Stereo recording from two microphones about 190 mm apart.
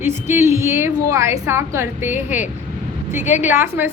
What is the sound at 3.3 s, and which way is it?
Speech, 10° right (ahead or behind).